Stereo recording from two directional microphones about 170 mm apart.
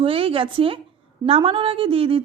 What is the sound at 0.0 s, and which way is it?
A woman's voice, 35° right (ahead or behind).